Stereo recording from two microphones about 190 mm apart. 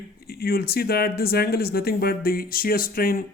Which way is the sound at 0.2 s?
55° left (ahead or behind).